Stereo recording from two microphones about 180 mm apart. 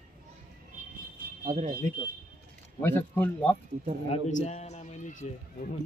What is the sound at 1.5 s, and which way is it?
Speech, 50° right (ahead or behind).